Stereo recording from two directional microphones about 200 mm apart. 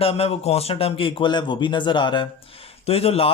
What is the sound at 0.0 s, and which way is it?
Speech, 30° left (ahead or behind).